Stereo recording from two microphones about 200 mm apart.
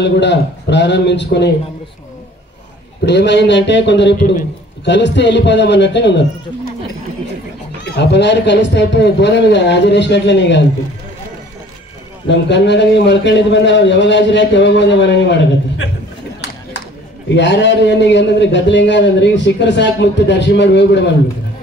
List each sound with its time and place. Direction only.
0.0 s a man's voice: 60° left (ahead or behind)
3.1 s a man's voice: 60° left (ahead or behind)
7.8 s a man's voice: 60° left (ahead or behind)
12.3 s a man's voice: 60° left (ahead or behind)
17.3 s a man's voice: 65° left (ahead or behind)